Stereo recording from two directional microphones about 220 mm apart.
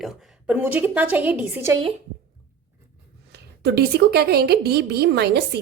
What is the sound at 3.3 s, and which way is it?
A woman's voice, 50° right (ahead or behind).